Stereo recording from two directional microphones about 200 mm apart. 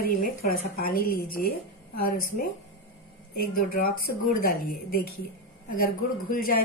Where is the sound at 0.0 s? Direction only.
45° left (ahead or behind).